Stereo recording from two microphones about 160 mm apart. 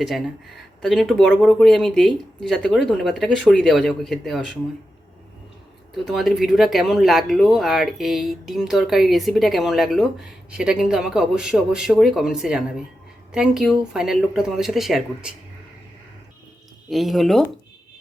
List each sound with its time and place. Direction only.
0.8 s speech: centre (ahead or behind)
5.9 s speech: centre (ahead or behind)
16.9 s speech: centre (ahead or behind)